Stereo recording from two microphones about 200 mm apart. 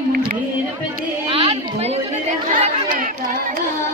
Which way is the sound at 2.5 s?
45° right (ahead or behind).